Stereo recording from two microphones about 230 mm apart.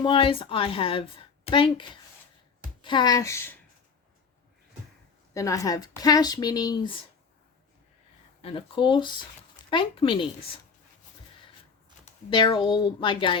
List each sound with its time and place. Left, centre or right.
0.0 s a woman's voice: left
5.3 s speech: centre
8.4 s a woman's voice: left
12.0 s a woman's voice: left